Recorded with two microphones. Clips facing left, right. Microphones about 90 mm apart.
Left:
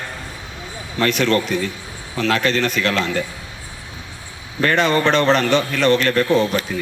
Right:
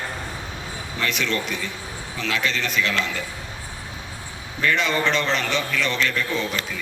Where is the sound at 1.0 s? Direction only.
50° left (ahead or behind).